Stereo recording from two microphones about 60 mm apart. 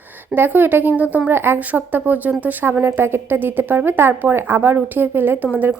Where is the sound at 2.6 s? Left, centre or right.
Right.